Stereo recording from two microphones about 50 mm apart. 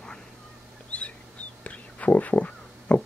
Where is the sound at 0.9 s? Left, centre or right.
Left.